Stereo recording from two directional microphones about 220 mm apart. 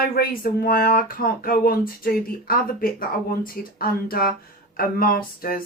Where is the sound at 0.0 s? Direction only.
40° left (ahead or behind).